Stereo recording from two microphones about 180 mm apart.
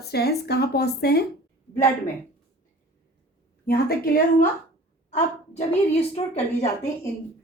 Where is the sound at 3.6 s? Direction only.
60° left (ahead or behind).